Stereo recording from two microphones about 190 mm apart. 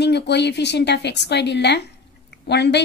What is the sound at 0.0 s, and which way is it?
Speech, 65° left (ahead or behind).